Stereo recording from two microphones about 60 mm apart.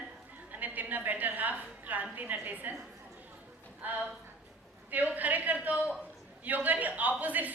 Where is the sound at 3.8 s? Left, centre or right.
Right.